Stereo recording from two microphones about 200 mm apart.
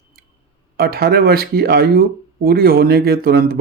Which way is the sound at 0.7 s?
50° right (ahead or behind).